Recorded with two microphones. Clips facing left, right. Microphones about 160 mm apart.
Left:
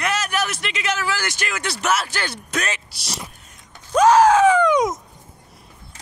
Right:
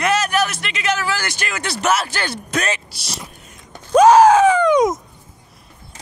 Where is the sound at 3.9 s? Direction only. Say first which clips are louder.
Right 4 dB; 15° right (ahead or behind).